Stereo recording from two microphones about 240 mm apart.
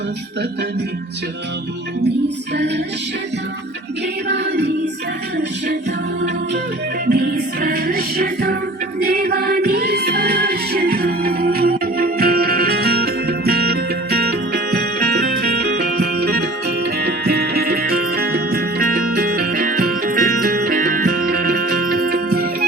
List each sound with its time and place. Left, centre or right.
2.6 s music: right
4.3 s music: right
7.1 s music: right